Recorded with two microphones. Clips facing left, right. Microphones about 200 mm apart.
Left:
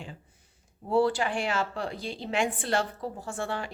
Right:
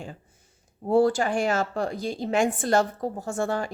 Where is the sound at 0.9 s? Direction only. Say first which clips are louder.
Right 4 dB; 45° right (ahead or behind).